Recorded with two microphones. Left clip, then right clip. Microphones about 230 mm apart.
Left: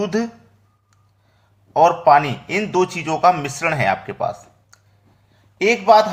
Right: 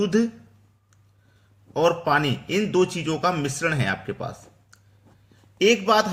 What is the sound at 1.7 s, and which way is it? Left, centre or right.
A man's voice, centre.